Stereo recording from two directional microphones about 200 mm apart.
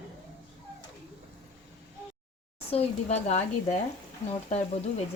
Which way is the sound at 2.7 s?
30° left (ahead or behind).